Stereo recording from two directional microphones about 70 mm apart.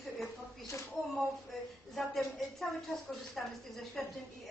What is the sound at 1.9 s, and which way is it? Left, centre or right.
Speech, centre.